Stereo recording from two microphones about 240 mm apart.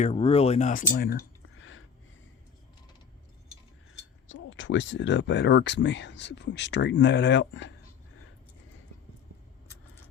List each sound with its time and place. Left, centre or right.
0.0 s speech: left
1.5 s a sound: left
4.3 s speech: left